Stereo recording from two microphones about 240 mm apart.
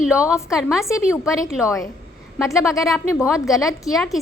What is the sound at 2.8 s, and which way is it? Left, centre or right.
Speech, centre.